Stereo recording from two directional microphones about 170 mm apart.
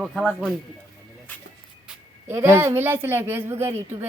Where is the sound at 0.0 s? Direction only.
5° left (ahead or behind).